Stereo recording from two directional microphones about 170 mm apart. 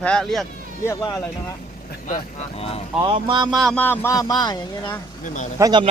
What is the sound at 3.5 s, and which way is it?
Speech, centre (ahead or behind).